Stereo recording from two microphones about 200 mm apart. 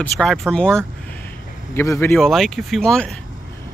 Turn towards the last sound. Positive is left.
turn(degrees=5)  # may be behind; listen again after turning